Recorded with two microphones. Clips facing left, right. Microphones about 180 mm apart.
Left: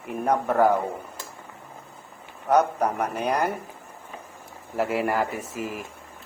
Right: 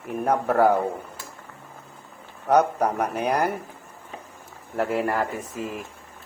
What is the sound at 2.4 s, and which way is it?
A man's voice, 10° right (ahead or behind).